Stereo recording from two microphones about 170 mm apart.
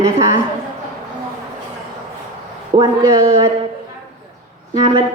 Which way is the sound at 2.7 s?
55° right (ahead or behind).